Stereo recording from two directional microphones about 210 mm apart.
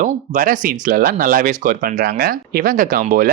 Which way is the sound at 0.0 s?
40° right (ahead or behind).